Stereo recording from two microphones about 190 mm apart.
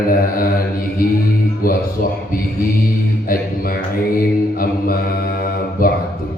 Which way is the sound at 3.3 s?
50° left (ahead or behind).